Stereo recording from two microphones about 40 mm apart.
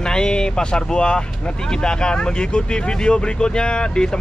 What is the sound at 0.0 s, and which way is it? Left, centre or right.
Speech, centre.